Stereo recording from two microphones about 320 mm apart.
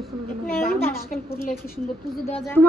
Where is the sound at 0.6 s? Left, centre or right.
Left.